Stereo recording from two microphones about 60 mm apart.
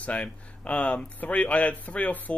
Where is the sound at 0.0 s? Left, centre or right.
Left.